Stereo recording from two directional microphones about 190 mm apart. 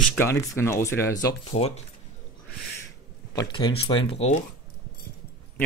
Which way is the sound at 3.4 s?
25° left (ahead or behind).